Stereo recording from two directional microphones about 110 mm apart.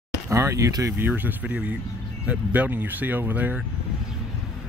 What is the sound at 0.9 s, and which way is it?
Speech, 15° right (ahead or behind).